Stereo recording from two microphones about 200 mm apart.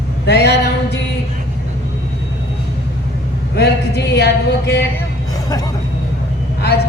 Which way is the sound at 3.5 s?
55° left (ahead or behind).